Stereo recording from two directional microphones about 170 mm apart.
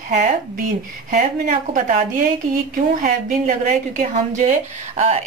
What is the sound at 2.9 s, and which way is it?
A woman's voice, 50° right (ahead or behind).